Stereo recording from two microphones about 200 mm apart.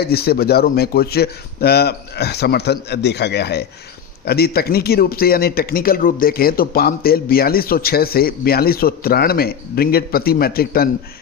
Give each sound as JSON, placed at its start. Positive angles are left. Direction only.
{"t": 0.0, "sound": "speech", "side_deg": 50}